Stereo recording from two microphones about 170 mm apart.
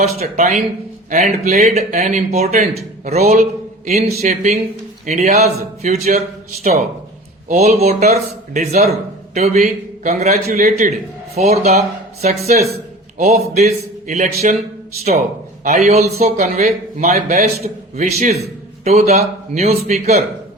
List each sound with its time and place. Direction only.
0.0 s a man's voice: 40° right (ahead or behind)
3.2 s a man's voice: 50° right (ahead or behind)
3.8 s a man's voice: 40° right (ahead or behind)
15.6 s a man's voice: 45° right (ahead or behind)